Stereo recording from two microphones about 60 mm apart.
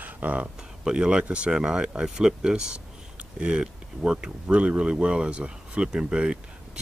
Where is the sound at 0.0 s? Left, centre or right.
Right.